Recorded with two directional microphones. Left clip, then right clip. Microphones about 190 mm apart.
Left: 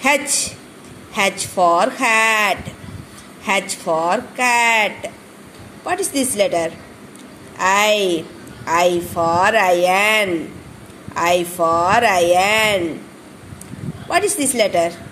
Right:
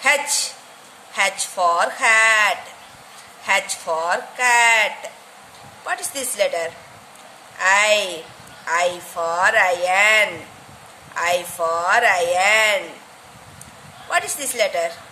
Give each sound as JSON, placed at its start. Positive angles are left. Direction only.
{"t": 0.0, "sound": "speech", "side_deg": 15}
{"t": 1.5, "sound": "speech", "side_deg": 15}
{"t": 3.8, "sound": "speech", "side_deg": 10}
{"t": 14.1, "sound": "speech", "side_deg": 15}